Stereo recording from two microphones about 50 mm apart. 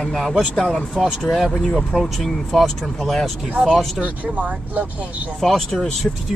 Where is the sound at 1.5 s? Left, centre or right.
Centre.